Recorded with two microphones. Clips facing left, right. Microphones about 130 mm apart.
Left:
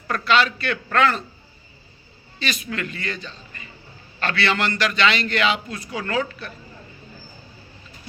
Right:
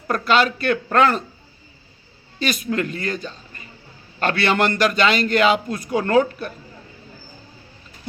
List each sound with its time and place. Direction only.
0.1 s a man's voice: 45° right (ahead or behind)
2.4 s a man's voice: 45° right (ahead or behind)